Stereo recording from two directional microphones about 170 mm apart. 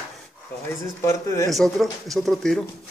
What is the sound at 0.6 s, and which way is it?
Speech, 15° left (ahead or behind).